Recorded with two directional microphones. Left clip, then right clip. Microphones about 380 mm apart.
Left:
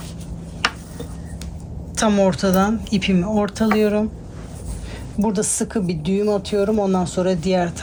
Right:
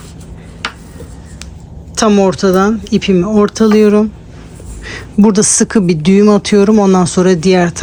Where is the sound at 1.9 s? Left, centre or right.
Centre.